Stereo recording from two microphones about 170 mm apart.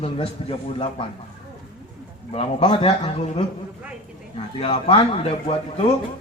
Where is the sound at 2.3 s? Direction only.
35° left (ahead or behind).